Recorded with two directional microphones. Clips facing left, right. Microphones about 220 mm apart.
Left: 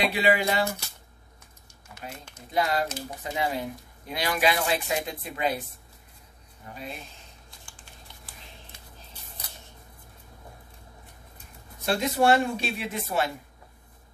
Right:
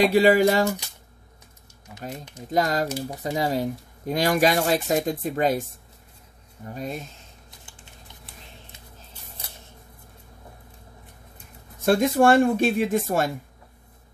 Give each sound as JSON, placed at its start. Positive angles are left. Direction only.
{"t": 0.0, "sound": "speech", "side_deg": -45}
{"t": 2.3, "sound": "speech", "side_deg": -40}
{"t": 6.7, "sound": "speech", "side_deg": -45}
{"t": 11.8, "sound": "speech", "side_deg": -50}